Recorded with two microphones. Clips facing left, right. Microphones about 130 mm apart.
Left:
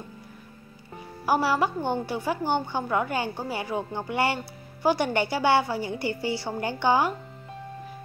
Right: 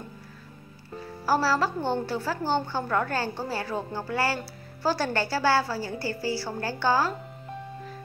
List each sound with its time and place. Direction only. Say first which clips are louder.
1.2 s a woman's voice: left 1 dB; 15° left (ahead or behind)